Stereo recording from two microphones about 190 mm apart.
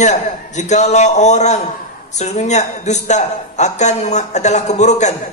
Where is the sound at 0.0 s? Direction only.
40° left (ahead or behind).